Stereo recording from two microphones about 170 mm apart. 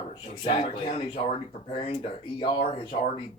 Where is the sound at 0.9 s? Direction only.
30° left (ahead or behind).